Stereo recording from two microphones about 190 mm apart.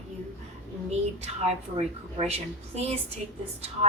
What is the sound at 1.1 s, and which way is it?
A woman's voice, 35° right (ahead or behind).